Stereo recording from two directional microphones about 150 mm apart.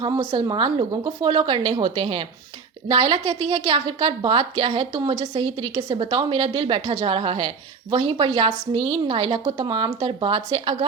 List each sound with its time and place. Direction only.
0.0 s a woman's voice: 35° right (ahead or behind)